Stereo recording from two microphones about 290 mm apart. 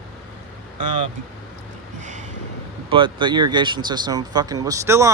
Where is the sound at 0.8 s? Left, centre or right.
Right.